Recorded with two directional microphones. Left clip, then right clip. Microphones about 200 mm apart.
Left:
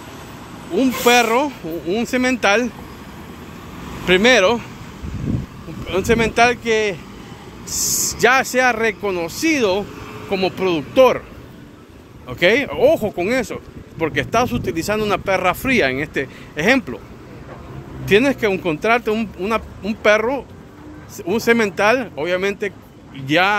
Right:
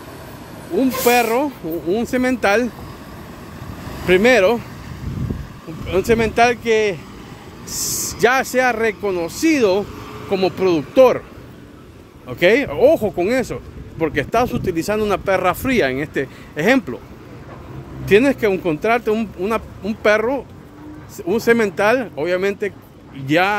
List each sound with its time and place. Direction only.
0.7 s speech: 5° right (ahead or behind)
1.7 s speech: 15° right (ahead or behind)
4.0 s speech: 20° right (ahead or behind)
5.9 s speech: 20° right (ahead or behind)
12.3 s speech: 25° right (ahead or behind)
18.0 s speech: 20° right (ahead or behind)